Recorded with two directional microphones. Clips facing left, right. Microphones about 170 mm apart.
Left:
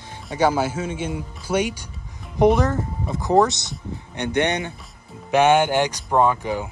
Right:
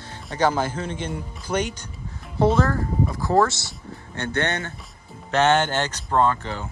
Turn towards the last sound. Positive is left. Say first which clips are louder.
# left 2 dB
turn(degrees=10)  # may be behind; listen again after turning